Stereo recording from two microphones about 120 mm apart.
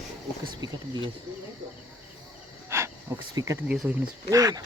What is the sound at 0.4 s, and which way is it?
Speech, 35° right (ahead or behind).